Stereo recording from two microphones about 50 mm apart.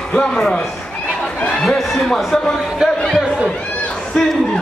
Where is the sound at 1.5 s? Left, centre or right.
Centre.